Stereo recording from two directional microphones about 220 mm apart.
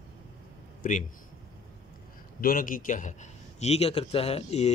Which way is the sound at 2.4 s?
40° left (ahead or behind).